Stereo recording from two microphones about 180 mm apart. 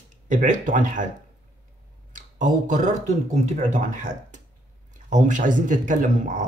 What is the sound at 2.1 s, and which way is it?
Speech, 45° right (ahead or behind).